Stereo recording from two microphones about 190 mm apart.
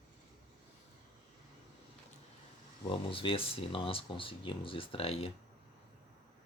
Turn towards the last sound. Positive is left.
turn(degrees=30)  # may be behind; listen again after turning